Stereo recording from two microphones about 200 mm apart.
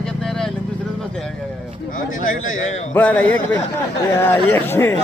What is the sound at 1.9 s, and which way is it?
Speech, 40° left (ahead or behind).